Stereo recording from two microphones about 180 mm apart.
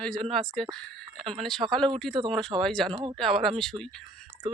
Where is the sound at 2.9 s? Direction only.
30° right (ahead or behind).